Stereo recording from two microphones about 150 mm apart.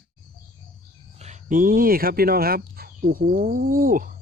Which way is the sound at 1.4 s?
65° right (ahead or behind).